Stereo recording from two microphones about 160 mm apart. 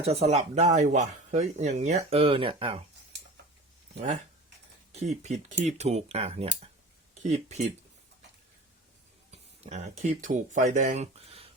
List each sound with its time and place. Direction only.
0.0 s speech: 40° right (ahead or behind)
3.9 s speech: 45° right (ahead or behind)
9.3 s speech: 40° right (ahead or behind)